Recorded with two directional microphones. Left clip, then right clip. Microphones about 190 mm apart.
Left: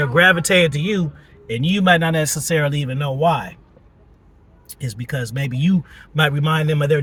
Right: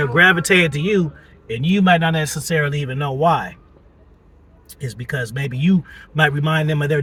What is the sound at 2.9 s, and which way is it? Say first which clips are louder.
Speech: right 2 dB; 15° left (ahead or behind).